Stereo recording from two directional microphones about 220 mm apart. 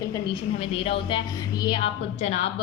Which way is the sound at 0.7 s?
25° left (ahead or behind).